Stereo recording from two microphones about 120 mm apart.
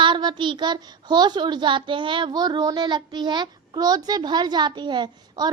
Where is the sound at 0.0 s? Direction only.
40° right (ahead or behind).